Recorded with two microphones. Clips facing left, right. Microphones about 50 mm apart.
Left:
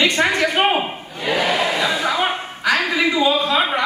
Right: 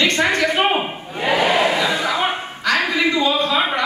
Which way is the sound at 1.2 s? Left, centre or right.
Right.